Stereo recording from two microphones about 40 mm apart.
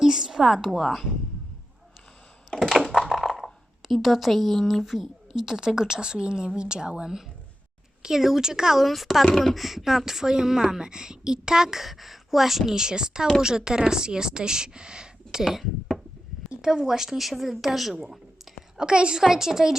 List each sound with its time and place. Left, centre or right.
0.0 s a woman's voice: centre
2.6 s computer keyboard: centre
3.1 s a sound: centre
5.4 s a woman's voice: centre
8.0 s speech: centre
8.8 s a woman's voice: centre
12.7 s a woman's voice: centre
16.6 s a woman's voice: centre
18.8 s a woman's voice: right
19.2 s speech: centre